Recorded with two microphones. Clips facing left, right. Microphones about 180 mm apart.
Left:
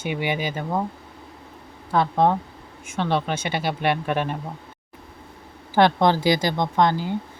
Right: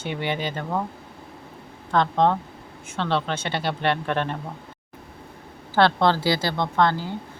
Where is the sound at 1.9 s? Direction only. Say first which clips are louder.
Left 1 dB; 10° left (ahead or behind).